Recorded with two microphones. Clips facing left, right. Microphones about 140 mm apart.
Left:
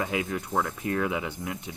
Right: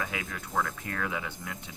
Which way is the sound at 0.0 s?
25° left (ahead or behind).